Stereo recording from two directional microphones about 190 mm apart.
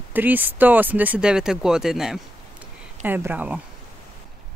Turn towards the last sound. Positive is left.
turn(degrees=-5)  # may be behind; listen again after turning